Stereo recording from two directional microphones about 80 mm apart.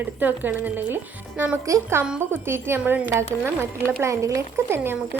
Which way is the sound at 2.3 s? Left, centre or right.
Right.